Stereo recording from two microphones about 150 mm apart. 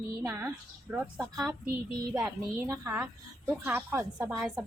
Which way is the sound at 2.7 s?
20° right (ahead or behind).